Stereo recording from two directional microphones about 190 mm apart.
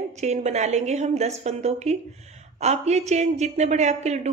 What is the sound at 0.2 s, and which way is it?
A woman's voice, 35° right (ahead or behind).